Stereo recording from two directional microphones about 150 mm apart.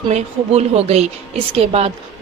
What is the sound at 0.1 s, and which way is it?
A woman's voice, 45° right (ahead or behind).